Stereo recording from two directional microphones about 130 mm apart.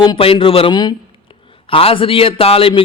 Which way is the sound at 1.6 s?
45° left (ahead or behind).